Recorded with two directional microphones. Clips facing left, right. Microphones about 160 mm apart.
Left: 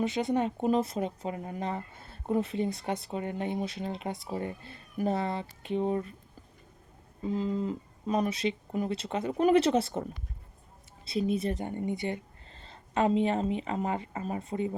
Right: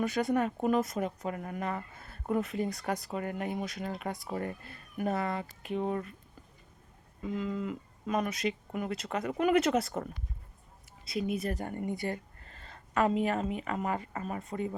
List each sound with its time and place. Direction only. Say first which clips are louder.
0.0 s speech: left 1 dB; 25° left (ahead or behind)
7.2 s speech: left 4 dB; 35° left (ahead or behind)